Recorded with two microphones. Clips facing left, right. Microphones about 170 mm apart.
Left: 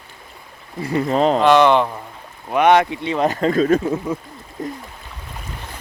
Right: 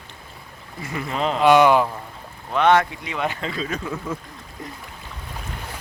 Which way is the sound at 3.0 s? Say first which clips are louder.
Left 8 dB; 35° left (ahead or behind).